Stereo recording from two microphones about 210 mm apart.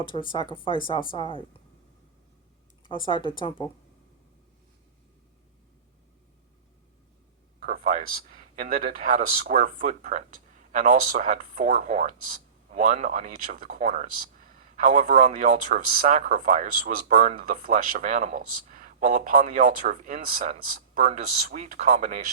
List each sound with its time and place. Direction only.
0.1 s speech: 25° left (ahead or behind)
2.8 s speech: 25° left (ahead or behind)
7.6 s speech: 40° right (ahead or behind)